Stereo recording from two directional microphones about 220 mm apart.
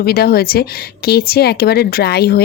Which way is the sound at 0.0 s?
45° left (ahead or behind).